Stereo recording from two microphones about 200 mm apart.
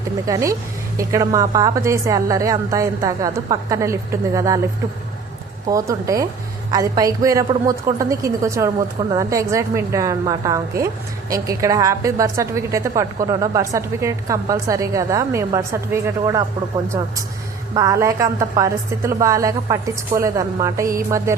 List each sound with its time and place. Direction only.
0.3 s a woman's voice: 15° right (ahead or behind)
5.6 s a woman's voice: 15° right (ahead or behind)
17.7 s a woman's voice: 15° right (ahead or behind)